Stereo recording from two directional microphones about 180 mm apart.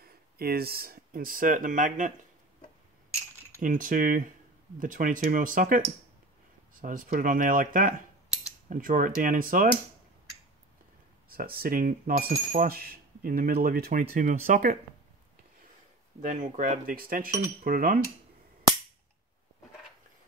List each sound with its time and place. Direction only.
0.0 s speech: 55° right (ahead or behind)
3.6 s speech: 50° right (ahead or behind)
11.2 s speech: 55° right (ahead or behind)
16.2 s speech: 45° right (ahead or behind)